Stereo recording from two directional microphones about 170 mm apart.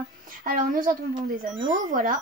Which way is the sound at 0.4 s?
55° right (ahead or behind).